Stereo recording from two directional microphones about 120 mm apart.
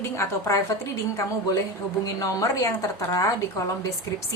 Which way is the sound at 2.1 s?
30° left (ahead or behind).